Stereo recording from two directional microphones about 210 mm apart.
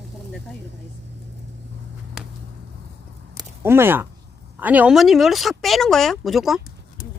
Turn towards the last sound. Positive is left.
turn(degrees=0)  # may be behind; listen again after turning